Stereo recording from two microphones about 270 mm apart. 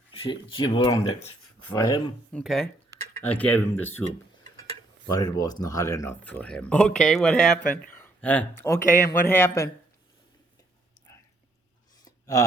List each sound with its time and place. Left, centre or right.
0.1 s speech: centre
2.4 s speech: centre
5.0 s speech: centre
12.0 s a sound: centre